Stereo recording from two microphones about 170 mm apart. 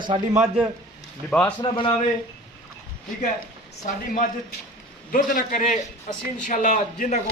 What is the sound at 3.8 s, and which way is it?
A man's voice, 50° left (ahead or behind).